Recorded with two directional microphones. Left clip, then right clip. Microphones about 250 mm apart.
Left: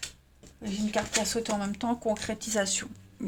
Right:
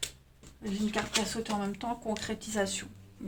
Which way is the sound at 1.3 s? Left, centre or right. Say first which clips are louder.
Left 4 dB; left.